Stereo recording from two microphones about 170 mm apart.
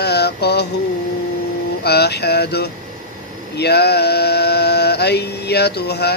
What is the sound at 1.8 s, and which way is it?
Speech, 70° left (ahead or behind).